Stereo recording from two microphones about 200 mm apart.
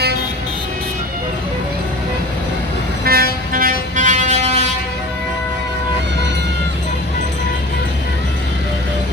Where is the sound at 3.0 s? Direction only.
45° right (ahead or behind).